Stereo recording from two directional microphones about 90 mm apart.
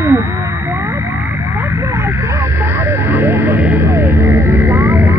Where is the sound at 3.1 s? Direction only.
25° right (ahead or behind).